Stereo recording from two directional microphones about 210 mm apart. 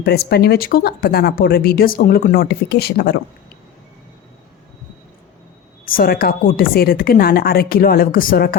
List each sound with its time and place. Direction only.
0.0 s speech: 50° left (ahead or behind)
5.8 s speech: 45° left (ahead or behind)